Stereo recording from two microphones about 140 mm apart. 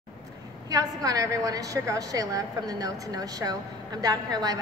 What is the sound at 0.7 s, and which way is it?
A woman's voice, 25° right (ahead or behind).